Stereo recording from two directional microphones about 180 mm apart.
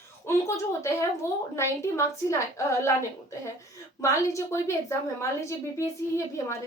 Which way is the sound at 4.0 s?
15° left (ahead or behind).